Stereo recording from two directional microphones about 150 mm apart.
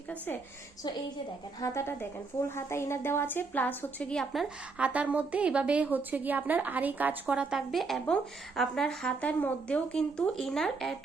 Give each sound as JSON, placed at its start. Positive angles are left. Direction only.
{"t": 1.6, "sound": "a woman's voice", "side_deg": 20}